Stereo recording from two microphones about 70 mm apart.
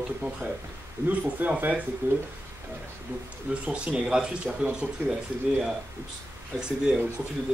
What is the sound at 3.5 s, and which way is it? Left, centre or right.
Speech, centre.